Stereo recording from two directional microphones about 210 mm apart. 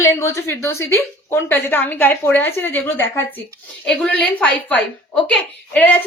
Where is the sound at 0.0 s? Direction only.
15° left (ahead or behind).